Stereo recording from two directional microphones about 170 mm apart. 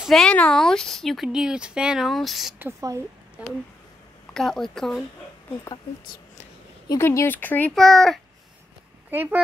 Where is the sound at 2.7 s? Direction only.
20° right (ahead or behind).